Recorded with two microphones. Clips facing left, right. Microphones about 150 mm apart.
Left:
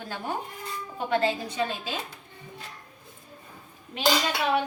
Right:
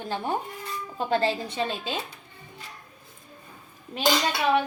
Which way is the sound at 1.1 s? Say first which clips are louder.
Right 1 dB; 30° right (ahead or behind).